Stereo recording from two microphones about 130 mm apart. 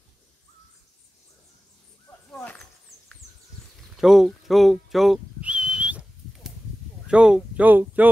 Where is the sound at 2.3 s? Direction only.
5° left (ahead or behind).